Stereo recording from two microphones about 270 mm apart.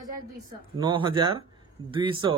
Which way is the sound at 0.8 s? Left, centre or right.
Centre.